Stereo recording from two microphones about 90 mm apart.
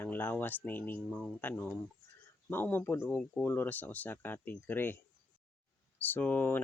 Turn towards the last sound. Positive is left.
turn(degrees=20)  # may be behind; listen again after turning